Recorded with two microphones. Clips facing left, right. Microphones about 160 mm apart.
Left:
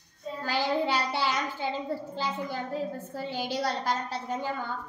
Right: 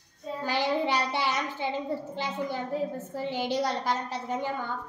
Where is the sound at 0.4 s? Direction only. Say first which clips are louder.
Even; 15° right (ahead or behind).